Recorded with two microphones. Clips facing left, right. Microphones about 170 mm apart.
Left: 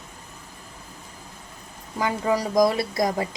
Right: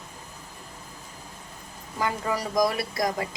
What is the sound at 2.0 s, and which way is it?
Speech, 20° left (ahead or behind).